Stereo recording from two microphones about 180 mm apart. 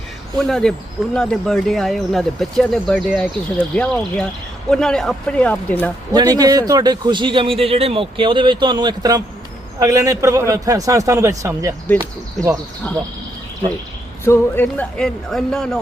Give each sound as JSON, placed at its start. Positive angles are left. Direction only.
{"t": 0.3, "sound": "speech", "side_deg": 0}
{"t": 6.1, "sound": "a man's voice", "side_deg": -20}
{"t": 14.3, "sound": "speech", "side_deg": 10}